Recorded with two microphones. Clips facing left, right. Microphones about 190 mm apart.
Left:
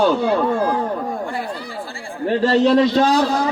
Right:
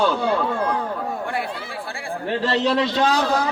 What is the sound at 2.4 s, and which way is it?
Speech, 40° left (ahead or behind).